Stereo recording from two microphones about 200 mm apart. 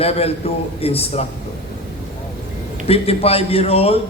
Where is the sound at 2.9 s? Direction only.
30° left (ahead or behind).